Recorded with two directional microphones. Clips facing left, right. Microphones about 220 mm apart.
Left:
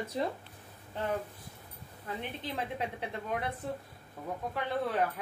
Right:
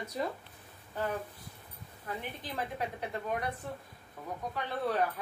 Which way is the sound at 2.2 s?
25° left (ahead or behind).